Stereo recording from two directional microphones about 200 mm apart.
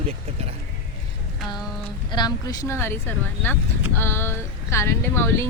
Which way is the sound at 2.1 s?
20° left (ahead or behind).